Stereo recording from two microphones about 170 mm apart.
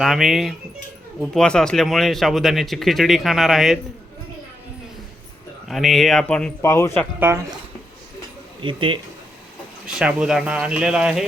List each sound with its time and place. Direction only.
0.0 s speech: centre (ahead or behind)
5.6 s speech: centre (ahead or behind)
7.2 s speech: 15° right (ahead or behind)
8.6 s speech: 30° right (ahead or behind)
9.8 s speech: 5° right (ahead or behind)